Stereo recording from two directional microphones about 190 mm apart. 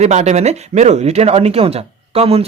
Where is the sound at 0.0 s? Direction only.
35° right (ahead or behind).